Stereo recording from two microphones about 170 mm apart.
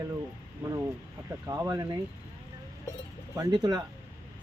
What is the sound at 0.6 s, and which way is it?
Vehicle, 15° right (ahead or behind).